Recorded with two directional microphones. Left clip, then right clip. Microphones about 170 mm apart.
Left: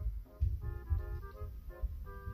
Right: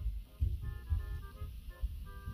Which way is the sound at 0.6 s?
35° left (ahead or behind).